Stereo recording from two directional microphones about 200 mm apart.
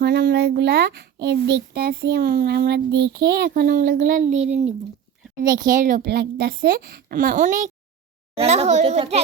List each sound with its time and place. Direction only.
0.0 s speech: 60° right (ahead or behind)
4.4 s a child's voice: 35° right (ahead or behind)